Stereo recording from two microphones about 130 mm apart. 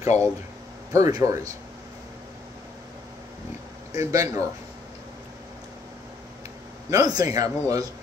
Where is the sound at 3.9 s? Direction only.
25° right (ahead or behind).